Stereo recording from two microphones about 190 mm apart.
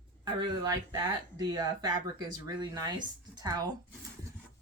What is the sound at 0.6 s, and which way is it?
Speech, 20° right (ahead or behind).